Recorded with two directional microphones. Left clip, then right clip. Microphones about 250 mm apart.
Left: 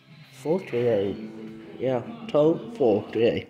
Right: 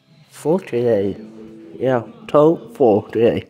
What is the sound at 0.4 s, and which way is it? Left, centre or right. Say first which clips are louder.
Speech: right 7 dB; right.